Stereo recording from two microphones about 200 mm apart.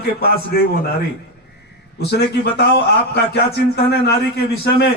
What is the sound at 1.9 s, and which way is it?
A man's voice, 55° left (ahead or behind).